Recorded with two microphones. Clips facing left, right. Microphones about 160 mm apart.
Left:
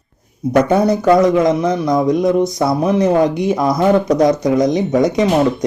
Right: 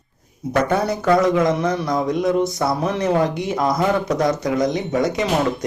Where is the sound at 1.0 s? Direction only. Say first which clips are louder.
Left 3 dB; 15° left (ahead or behind).